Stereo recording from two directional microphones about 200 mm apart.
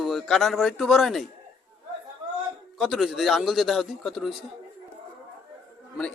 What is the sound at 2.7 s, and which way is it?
A man's voice, centre (ahead or behind).